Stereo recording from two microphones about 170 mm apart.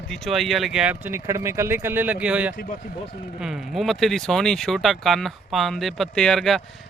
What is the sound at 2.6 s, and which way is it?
Speech, 45° left (ahead or behind).